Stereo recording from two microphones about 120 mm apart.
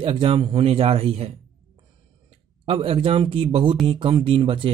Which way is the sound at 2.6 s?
50° right (ahead or behind).